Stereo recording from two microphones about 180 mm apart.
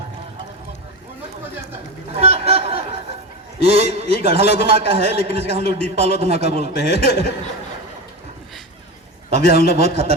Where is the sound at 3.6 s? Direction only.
35° right (ahead or behind).